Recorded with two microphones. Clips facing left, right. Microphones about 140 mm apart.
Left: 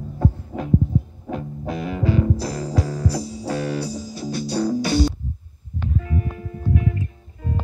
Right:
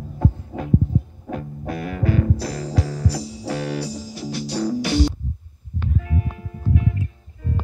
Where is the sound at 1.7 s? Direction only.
20° left (ahead or behind).